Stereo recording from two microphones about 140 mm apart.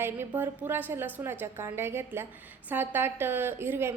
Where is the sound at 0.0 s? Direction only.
15° right (ahead or behind).